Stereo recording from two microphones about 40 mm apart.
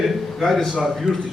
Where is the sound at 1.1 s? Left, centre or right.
Right.